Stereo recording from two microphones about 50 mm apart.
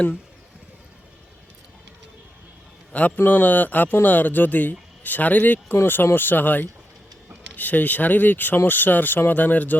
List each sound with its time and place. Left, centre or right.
3.2 s speech: left